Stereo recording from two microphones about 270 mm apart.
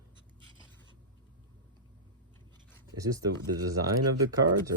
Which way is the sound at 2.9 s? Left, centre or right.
Centre.